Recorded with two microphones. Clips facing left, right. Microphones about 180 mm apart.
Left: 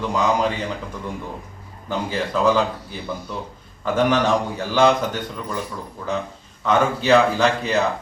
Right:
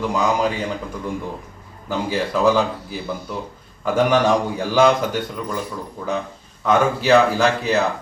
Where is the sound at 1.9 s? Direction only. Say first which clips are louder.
Right 2 dB; 10° right (ahead or behind).